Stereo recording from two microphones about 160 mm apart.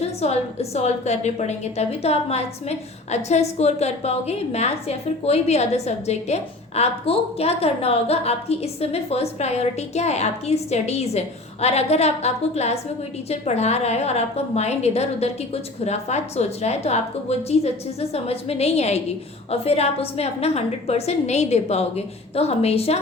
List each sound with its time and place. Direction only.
0.0 s a woman's voice: 40° left (ahead or behind)